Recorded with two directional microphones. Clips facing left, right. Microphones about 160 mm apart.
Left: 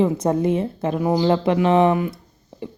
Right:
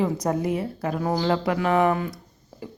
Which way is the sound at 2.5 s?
25° left (ahead or behind).